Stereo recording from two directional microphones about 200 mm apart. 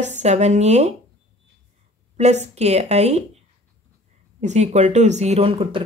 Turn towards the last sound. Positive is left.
turn(degrees=-30)  # may be behind; listen again after turning